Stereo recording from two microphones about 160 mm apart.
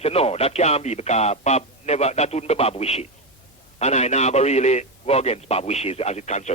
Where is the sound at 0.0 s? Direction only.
40° left (ahead or behind).